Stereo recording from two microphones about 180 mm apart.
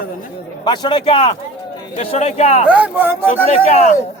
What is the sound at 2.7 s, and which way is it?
Speech, 10° right (ahead or behind).